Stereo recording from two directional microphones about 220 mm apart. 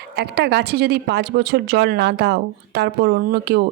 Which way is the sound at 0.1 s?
50° right (ahead or behind).